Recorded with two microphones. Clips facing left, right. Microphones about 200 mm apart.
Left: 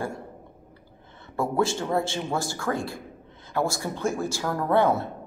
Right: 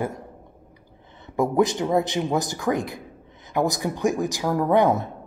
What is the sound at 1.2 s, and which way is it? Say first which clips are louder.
Speech: right 4 dB; 15° right (ahead or behind).